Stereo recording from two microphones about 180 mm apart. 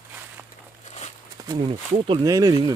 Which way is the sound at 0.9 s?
40° left (ahead or behind).